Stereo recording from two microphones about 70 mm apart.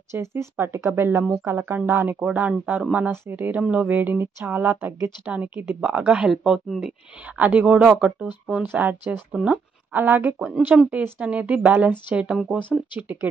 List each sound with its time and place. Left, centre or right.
0.1 s speech: right
2.2 s speech: right
5.2 s speech: right
6.3 s speech: centre
7.2 s speech: right
9.9 s speech: right
12.7 s speech: centre